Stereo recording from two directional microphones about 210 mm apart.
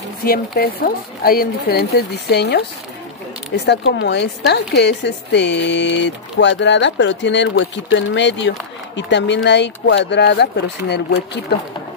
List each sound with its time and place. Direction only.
0.2 s speech: 45° left (ahead or behind)
3.6 s speech: 55° left (ahead or behind)